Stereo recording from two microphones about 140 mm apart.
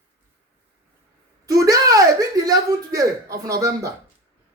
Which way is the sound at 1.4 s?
25° right (ahead or behind).